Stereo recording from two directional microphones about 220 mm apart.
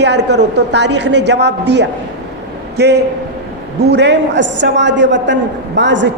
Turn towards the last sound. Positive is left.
turn(degrees=-55)  # may be behind; listen again after turning